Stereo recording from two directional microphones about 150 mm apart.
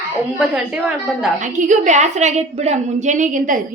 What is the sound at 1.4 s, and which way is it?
A woman's voice, 55° right (ahead or behind).